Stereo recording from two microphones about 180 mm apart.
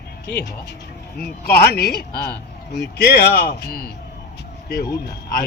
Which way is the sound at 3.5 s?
60° left (ahead or behind).